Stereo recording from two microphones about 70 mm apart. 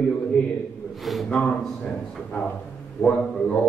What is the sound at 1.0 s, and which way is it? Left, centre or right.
Speech, centre.